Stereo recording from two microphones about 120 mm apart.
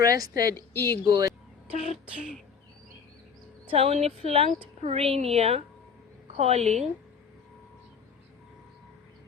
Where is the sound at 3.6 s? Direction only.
60° right (ahead or behind).